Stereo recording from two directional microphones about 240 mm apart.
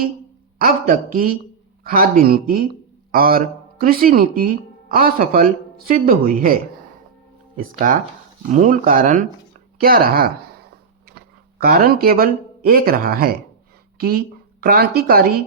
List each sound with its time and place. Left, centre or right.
0.6 s a woman's voice: right